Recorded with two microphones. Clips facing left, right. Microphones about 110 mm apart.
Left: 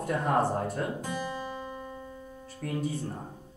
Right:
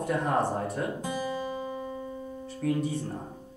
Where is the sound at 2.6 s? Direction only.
Centre (ahead or behind).